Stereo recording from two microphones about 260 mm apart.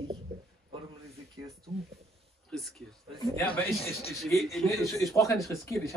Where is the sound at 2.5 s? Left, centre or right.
Centre.